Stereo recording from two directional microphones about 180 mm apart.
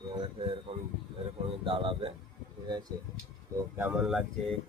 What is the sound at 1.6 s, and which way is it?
Speech, 30° right (ahead or behind).